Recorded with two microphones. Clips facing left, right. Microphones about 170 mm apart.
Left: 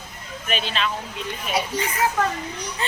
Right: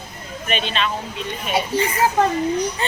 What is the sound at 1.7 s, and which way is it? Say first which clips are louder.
Speech: right 6 dB; 30° right (ahead or behind).